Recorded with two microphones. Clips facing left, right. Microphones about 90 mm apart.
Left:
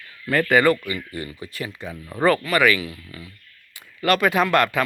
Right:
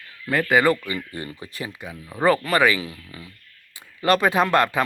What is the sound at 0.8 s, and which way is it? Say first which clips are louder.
Speech: even; 30° right (ahead or behind).